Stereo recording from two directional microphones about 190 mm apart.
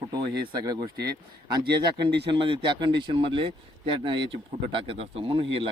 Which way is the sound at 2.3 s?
25° right (ahead or behind).